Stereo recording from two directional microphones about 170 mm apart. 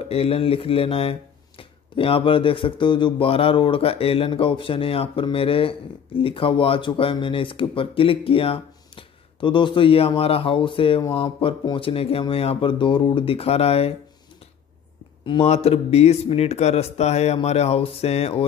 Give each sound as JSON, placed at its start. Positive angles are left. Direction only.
{"t": 0.1, "sound": "speech", "side_deg": 35}
{"t": 15.2, "sound": "speech", "side_deg": 35}